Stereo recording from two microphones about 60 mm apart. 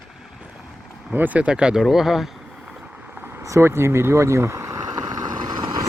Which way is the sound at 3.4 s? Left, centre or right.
Right.